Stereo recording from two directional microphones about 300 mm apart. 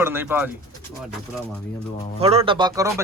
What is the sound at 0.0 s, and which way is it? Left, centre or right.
Speech, centre.